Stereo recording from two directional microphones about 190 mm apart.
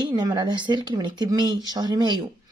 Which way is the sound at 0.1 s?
20° right (ahead or behind).